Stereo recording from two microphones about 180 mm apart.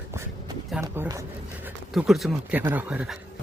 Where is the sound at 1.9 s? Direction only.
Centre (ahead or behind).